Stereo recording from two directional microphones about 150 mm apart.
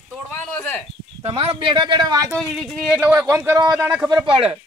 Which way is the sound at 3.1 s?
20° right (ahead or behind).